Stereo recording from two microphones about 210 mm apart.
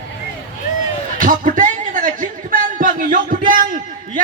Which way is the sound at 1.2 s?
40° right (ahead or behind).